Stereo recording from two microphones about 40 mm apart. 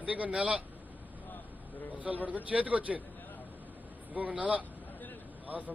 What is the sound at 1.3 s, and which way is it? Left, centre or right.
Vehicle, left.